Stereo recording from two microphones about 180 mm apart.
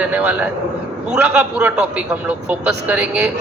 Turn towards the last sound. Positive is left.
turn(degrees=-5)  # may be behind; listen again after turning